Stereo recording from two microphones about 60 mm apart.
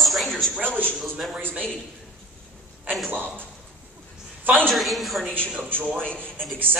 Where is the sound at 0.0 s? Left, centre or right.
Centre.